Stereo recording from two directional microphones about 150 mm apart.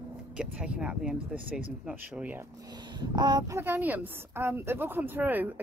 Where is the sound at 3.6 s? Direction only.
15° right (ahead or behind).